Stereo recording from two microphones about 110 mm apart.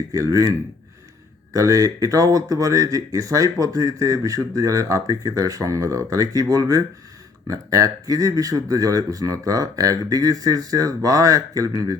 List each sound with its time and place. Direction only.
0.1 s speech: 30° right (ahead or behind)
1.5 s speech: 30° right (ahead or behind)